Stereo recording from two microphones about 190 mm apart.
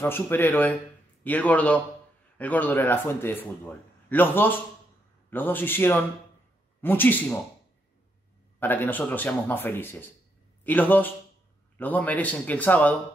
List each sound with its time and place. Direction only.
0.0 s speech: 10° left (ahead or behind)
8.5 s speech: 10° left (ahead or behind)